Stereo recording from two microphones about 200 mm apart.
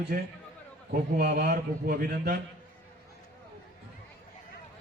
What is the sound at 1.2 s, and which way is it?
A man's voice, 45° right (ahead or behind).